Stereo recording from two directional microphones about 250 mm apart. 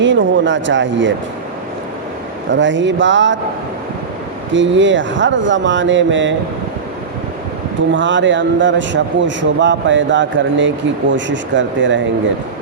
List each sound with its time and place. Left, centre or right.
0.0 s speech: right
2.5 s a man's voice: right
4.5 s a man's voice: right
7.9 s a man's voice: right